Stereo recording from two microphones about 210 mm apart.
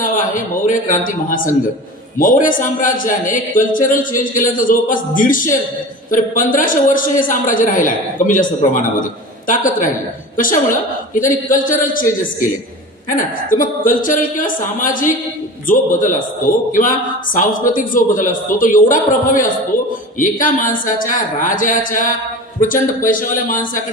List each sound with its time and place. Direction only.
0.0 s a man's voice: 40° left (ahead or behind)
13.1 s a man's voice: 40° left (ahead or behind)
17.3 s a man's voice: 40° left (ahead or behind)